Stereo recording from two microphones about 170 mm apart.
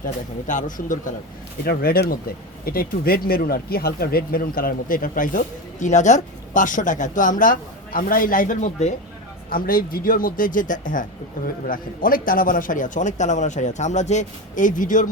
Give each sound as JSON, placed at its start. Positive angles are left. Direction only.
{"t": 0.0, "sound": "a man's voice", "side_deg": 50}
{"t": 1.6, "sound": "a man's voice", "side_deg": 65}